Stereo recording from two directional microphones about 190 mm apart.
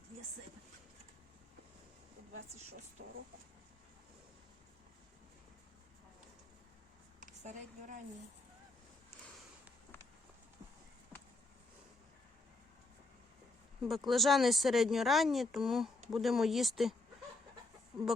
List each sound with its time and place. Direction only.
7.2 s a woman's voice: 40° right (ahead or behind)
11.1 s a sound: 10° left (ahead or behind)
13.8 s speech: centre (ahead or behind)
17.9 s speech: 30° right (ahead or behind)